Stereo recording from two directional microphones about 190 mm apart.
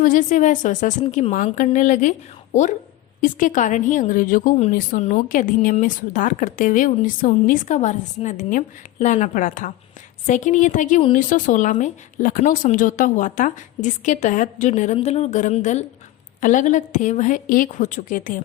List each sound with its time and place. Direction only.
0.0 s a woman's voice: 45° left (ahead or behind)